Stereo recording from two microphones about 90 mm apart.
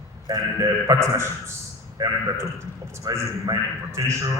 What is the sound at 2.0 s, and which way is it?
Speech, 45° right (ahead or behind).